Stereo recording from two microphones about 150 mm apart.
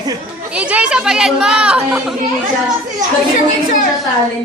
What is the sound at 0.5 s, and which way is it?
Speech, 10° right (ahead or behind).